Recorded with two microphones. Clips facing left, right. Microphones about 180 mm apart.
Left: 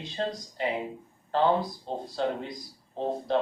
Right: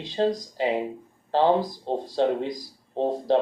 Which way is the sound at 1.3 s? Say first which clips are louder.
Right 4 dB; 30° right (ahead or behind).